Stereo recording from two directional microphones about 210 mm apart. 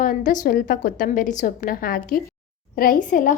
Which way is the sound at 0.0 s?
40° left (ahead or behind).